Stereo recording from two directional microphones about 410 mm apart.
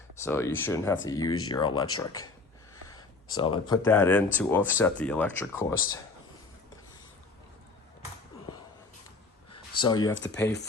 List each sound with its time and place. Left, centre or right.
0.2 s speech: centre
3.3 s speech: centre
9.5 s a sound: centre
10.2 s speech: left